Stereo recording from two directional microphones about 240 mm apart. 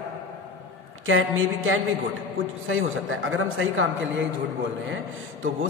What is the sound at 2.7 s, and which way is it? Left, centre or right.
A man's voice, right.